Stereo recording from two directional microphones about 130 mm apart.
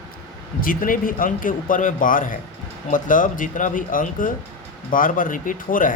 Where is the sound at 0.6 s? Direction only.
90° left.